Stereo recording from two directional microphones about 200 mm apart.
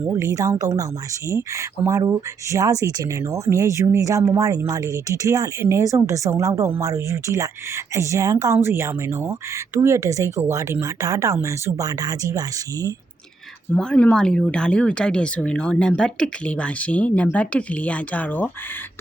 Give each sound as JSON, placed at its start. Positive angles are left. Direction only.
{"t": 0.0, "sound": "speech", "side_deg": -15}
{"t": 13.7, "sound": "speech", "side_deg": 5}